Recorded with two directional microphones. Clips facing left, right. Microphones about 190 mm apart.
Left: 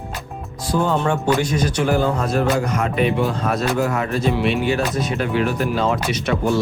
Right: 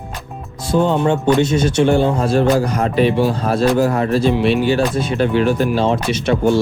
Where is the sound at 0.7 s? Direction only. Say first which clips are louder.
Right 4 dB; 25° right (ahead or behind).